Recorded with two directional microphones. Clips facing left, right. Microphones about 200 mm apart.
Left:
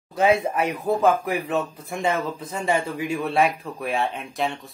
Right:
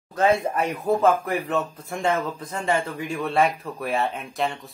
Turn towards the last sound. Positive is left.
turn(degrees=0)  # may be behind; listen again after turning